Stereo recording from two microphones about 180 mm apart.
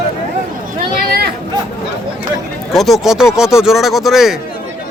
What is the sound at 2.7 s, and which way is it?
A man's voice, centre (ahead or behind).